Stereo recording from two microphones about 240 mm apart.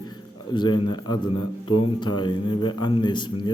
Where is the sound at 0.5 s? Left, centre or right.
Centre.